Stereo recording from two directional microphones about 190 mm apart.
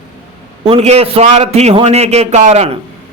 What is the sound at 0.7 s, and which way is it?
A man's voice, 30° right (ahead or behind).